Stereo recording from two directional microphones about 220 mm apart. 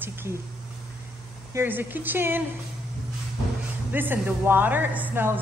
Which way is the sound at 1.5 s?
10° right (ahead or behind).